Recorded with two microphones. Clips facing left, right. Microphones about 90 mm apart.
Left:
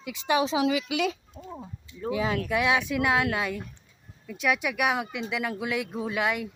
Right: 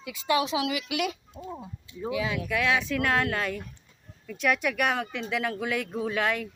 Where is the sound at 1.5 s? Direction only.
5° right (ahead or behind).